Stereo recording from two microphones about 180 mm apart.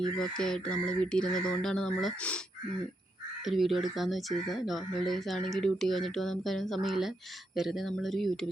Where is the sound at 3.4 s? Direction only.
Centre (ahead or behind).